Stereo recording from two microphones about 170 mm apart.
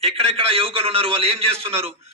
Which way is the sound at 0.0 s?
35° right (ahead or behind).